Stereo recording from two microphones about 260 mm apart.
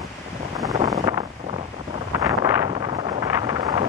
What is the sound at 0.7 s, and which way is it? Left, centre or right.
Wind noise, centre.